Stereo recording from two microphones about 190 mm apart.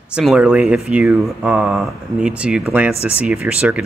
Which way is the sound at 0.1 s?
5° right (ahead or behind).